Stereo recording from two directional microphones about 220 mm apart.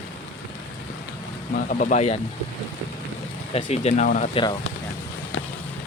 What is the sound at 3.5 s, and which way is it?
Speech, 30° left (ahead or behind).